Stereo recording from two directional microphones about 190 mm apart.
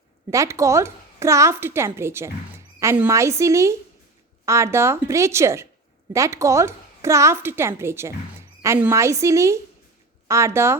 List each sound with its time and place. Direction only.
0.3 s a woman's voice: 15° right (ahead or behind)